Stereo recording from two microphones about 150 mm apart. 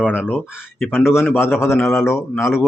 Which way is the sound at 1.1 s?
5° right (ahead or behind).